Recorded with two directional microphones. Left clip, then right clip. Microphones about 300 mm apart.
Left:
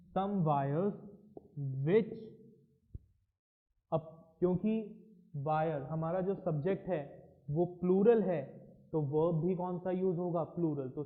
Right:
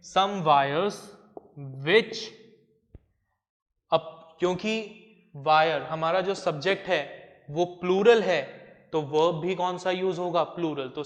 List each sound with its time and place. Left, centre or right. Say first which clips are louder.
0.1 s a man's voice: right 12 dB; centre
3.9 s mantra: right 11 dB; centre
5.5 s a man's voice: right 12 dB; centre
7.5 s a man's voice: right 7 dB; right
7.8 s a man's voice: right 8 dB; centre